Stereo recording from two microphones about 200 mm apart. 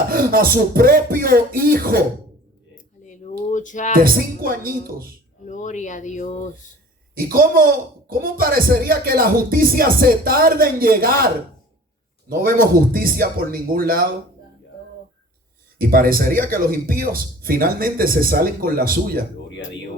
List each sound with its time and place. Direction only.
0.1 s speech: 45° right (ahead or behind)
2.7 s a sound: 40° left (ahead or behind)
3.5 s speech: 40° left (ahead or behind)
3.9 s speech: 45° right (ahead or behind)
5.5 s speech: 40° left (ahead or behind)
7.2 s speech: 45° right (ahead or behind)
12.3 s speech: 45° right (ahead or behind)
15.8 s speech: 45° right (ahead or behind)
19.5 s music: 65° left (ahead or behind)